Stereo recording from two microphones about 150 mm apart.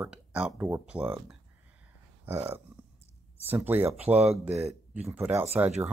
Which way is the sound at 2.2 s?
15° right (ahead or behind).